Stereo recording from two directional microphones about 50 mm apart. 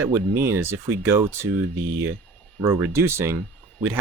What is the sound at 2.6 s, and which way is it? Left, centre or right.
Speech, right.